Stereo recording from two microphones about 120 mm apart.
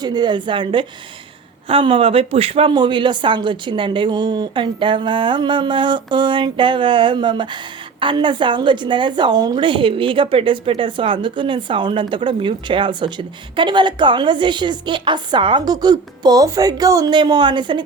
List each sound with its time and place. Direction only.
0.0 s speech: 35° right (ahead or behind)